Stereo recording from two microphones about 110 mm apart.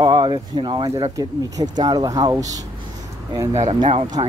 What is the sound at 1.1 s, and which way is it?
Speech, 35° right (ahead or behind).